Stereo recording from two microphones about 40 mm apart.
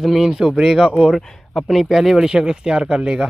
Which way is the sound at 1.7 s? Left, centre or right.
Centre.